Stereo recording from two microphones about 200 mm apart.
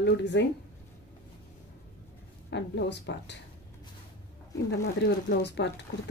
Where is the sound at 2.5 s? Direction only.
60° left (ahead or behind).